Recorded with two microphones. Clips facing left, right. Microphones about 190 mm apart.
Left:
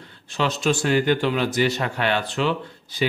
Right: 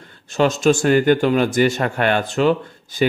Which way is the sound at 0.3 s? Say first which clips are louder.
Right 7 dB; 45° right (ahead or behind).